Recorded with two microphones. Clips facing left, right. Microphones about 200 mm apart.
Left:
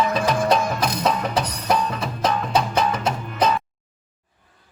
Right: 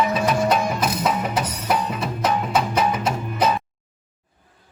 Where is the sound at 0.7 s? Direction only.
5° right (ahead or behind).